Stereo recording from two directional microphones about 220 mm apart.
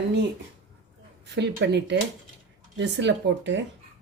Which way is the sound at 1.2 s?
50° right (ahead or behind).